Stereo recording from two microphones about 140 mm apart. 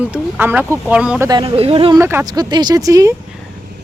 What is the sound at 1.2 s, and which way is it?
Speech, 30° right (ahead or behind).